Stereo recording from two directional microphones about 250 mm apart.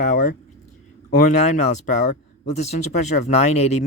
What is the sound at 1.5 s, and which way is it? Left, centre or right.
Speech, left.